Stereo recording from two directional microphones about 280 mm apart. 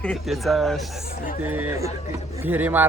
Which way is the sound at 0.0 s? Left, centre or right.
Centre.